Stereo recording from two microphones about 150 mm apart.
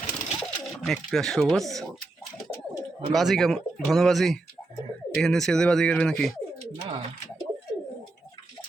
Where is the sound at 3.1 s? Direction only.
Centre (ahead or behind).